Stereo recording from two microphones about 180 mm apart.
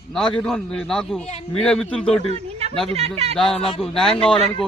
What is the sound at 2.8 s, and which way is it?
Speech, 35° right (ahead or behind).